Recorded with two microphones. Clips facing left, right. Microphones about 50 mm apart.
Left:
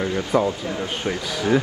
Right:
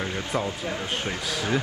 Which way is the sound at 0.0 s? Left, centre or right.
Left.